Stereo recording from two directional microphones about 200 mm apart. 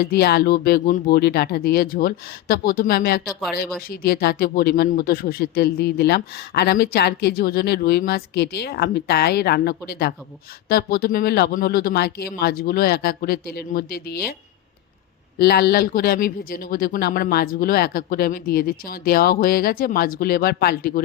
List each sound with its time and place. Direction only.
0.0 s speech: 55° left (ahead or behind)
15.4 s speech: 50° left (ahead or behind)